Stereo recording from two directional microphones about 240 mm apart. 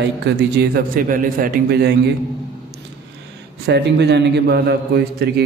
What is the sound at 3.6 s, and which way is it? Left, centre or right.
Mantra, right.